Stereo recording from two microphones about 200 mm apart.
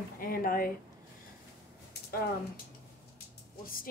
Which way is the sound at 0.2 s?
45° left (ahead or behind).